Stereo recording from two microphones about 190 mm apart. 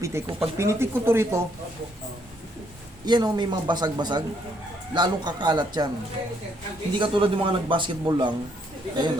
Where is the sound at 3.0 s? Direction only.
20° right (ahead or behind).